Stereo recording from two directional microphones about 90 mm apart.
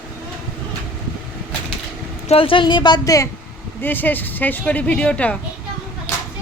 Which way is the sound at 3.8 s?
20° left (ahead or behind).